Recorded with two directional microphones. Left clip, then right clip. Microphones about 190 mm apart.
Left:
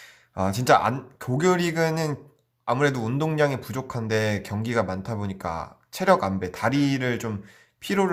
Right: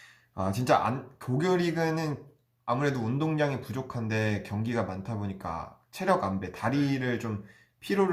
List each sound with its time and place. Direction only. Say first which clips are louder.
0.3 s speech: left 6 dB; 50° left (ahead or behind)